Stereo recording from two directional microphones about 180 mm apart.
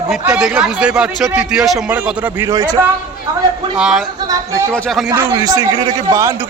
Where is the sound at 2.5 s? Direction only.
20° right (ahead or behind).